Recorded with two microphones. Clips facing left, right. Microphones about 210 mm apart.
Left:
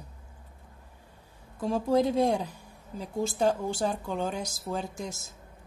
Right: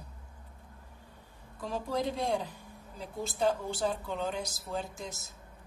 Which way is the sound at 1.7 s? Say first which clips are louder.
Left 8 dB; 45° left (ahead or behind).